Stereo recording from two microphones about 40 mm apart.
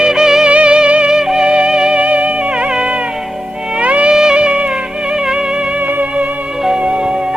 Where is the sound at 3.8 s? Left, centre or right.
Right.